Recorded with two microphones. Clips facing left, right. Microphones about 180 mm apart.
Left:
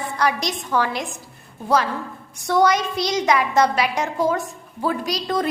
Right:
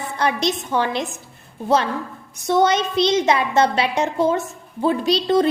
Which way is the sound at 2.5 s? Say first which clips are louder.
Right 1 dB; 25° right (ahead or behind).